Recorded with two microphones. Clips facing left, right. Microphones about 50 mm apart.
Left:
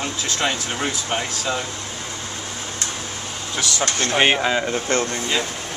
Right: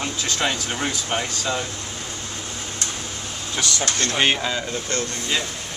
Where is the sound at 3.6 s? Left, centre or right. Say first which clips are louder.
Left 2 dB; centre.